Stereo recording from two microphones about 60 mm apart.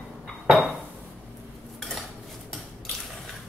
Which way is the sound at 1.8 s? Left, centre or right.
Centre.